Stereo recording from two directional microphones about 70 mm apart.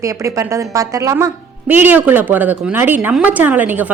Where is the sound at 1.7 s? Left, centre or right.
Right.